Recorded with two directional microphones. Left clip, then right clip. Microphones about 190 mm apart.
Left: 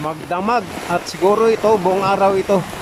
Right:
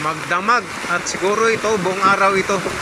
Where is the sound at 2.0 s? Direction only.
20° left (ahead or behind).